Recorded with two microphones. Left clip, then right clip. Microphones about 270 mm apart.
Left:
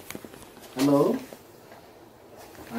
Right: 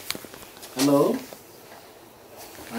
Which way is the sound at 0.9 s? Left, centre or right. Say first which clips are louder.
Right 2 dB; centre.